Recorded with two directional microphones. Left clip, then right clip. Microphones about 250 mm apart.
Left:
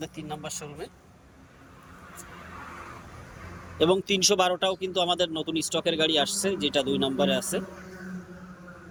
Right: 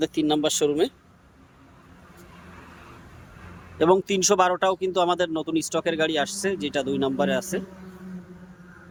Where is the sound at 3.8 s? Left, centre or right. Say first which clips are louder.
Right 3 dB; centre.